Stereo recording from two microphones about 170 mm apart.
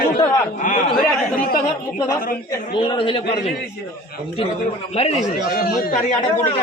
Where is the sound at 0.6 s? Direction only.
55° left (ahead or behind).